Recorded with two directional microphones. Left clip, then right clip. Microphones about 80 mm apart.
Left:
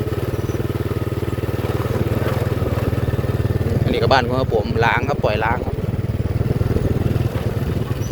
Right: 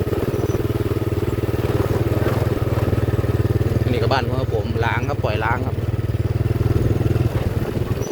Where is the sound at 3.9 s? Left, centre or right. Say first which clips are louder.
Left 5 dB; left.